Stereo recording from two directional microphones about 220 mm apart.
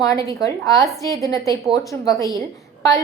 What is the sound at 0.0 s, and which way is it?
A woman's voice, 15° left (ahead or behind).